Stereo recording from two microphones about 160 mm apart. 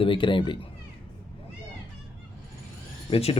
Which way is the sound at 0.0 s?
30° left (ahead or behind).